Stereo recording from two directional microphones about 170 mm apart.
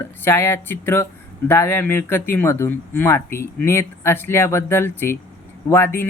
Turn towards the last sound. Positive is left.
turn(degrees=15)  # may be behind; listen again after turning